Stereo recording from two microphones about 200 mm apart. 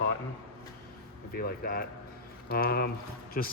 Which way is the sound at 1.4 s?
50° left (ahead or behind).